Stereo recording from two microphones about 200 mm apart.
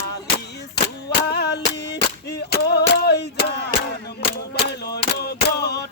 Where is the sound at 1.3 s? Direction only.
55° left (ahead or behind).